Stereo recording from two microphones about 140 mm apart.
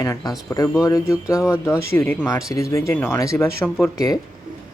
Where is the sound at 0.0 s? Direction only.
25° left (ahead or behind).